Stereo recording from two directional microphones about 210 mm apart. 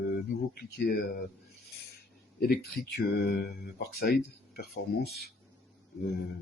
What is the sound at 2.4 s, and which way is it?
Speech, 50° left (ahead or behind).